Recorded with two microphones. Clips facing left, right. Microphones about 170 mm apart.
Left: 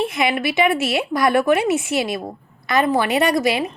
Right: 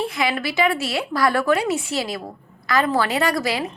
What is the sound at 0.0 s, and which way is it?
A woman's voice, 20° left (ahead or behind).